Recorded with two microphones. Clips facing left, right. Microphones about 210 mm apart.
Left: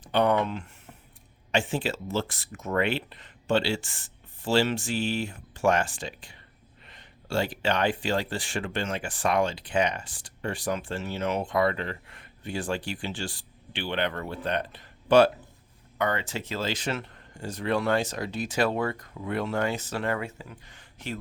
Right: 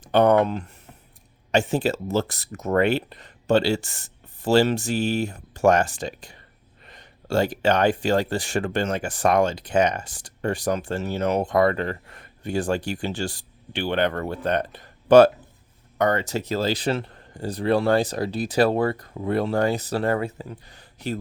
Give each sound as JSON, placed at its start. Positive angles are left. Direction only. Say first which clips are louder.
{"t": 0.0, "sound": "speech", "louder": "right 6 dB", "side_deg": -45}